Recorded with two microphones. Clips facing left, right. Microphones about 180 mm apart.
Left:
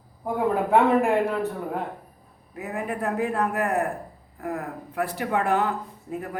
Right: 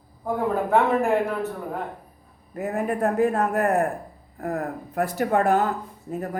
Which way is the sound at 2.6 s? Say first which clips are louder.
Right 5 dB; 45° right (ahead or behind).